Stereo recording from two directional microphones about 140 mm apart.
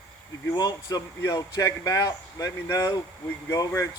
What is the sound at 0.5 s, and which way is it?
Speech, 25° left (ahead or behind).